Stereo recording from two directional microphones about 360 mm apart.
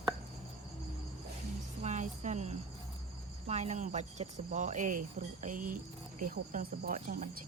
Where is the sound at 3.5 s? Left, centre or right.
Centre.